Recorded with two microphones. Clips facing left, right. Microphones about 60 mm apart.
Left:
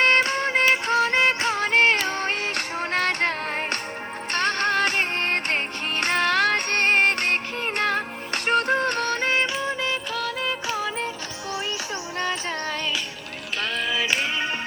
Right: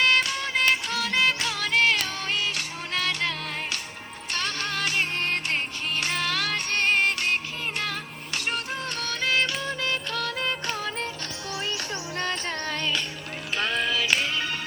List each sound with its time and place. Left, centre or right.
0.0 s music: left
9.4 s music: left
10.1 s music: centre
13.9 s music: left